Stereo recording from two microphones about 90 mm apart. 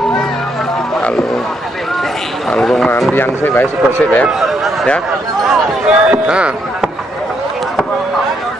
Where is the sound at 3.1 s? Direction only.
25° left (ahead or behind).